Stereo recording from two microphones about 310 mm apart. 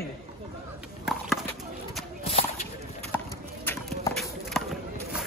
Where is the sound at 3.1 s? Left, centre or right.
Centre.